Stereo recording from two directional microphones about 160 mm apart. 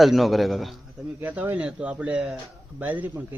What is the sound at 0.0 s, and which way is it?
Speech, centre (ahead or behind).